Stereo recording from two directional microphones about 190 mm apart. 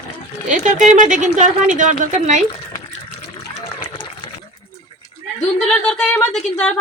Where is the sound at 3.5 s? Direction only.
25° left (ahead or behind).